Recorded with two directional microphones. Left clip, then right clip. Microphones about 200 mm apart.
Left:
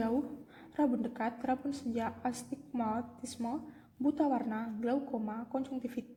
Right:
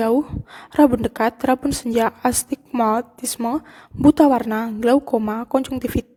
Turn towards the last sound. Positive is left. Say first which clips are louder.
# right 17 dB
turn(degrees=-50)  # may be behind; listen again after turning